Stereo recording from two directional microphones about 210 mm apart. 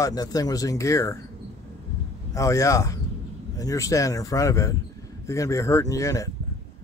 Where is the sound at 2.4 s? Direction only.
15° left (ahead or behind).